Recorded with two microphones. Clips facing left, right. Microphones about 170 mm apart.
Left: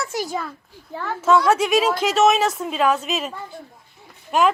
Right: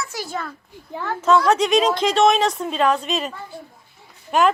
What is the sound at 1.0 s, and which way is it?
A woman's voice, centre (ahead or behind).